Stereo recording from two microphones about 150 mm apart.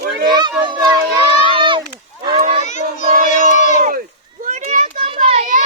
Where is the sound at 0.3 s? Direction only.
30° right (ahead or behind).